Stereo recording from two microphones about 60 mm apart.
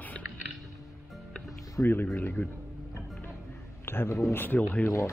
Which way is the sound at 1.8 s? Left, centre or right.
Left.